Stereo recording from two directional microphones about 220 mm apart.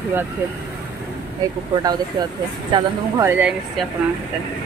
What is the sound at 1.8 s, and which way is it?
Speech, 20° right (ahead or behind).